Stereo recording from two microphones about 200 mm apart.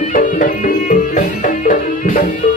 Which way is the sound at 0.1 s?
40° left (ahead or behind).